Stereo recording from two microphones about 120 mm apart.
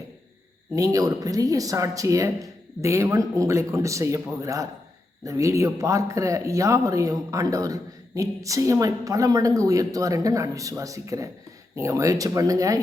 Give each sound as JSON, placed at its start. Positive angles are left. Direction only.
{"t": 0.8, "sound": "speech", "side_deg": -30}